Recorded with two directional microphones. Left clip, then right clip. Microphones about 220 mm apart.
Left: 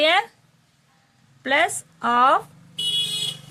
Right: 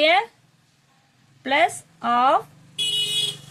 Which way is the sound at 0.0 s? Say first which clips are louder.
Right 1 dB; 20° left (ahead or behind).